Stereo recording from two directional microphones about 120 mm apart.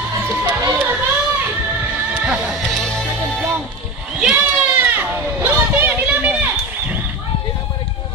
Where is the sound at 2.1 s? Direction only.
10° right (ahead or behind).